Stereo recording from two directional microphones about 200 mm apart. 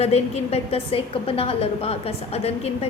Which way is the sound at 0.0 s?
30° left (ahead or behind).